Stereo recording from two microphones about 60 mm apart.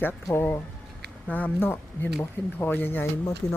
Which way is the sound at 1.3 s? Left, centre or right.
Left.